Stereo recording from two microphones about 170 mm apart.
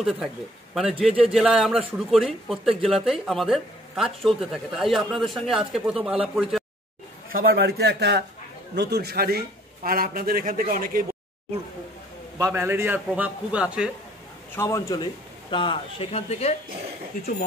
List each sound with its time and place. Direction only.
0.7 s speech: centre (ahead or behind)
7.3 s a man's voice: 65° right (ahead or behind)
12.4 s a man's voice: 15° right (ahead or behind)
14.5 s a man's voice: 15° left (ahead or behind)
15.5 s speech: 30° left (ahead or behind)